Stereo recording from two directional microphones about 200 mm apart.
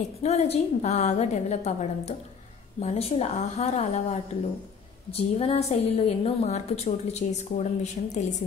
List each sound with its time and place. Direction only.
0.2 s a woman's voice: 30° left (ahead or behind)